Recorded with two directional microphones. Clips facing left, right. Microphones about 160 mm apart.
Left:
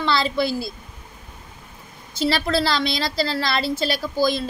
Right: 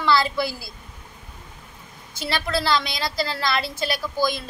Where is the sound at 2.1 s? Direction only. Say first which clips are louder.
Left 5 dB; 30° left (ahead or behind).